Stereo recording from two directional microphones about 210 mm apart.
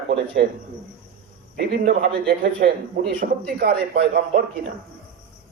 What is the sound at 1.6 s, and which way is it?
A man's voice, 55° right (ahead or behind).